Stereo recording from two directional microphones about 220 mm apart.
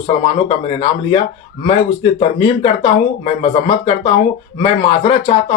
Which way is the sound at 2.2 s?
25° left (ahead or behind).